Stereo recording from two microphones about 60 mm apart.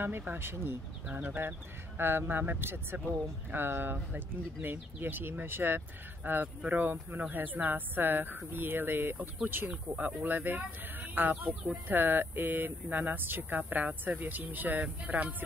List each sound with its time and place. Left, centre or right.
0.4 s speech: right
1.0 s speech: right